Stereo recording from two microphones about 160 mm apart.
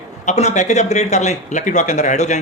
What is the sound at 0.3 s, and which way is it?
Speech, 45° left (ahead or behind).